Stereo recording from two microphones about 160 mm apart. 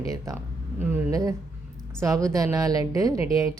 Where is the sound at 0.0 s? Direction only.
20° right (ahead or behind).